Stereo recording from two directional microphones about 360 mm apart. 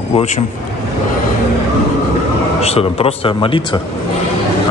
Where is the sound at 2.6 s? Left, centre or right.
Centre.